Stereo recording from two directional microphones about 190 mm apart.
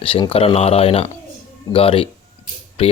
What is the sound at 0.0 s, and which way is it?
Speech, 30° left (ahead or behind).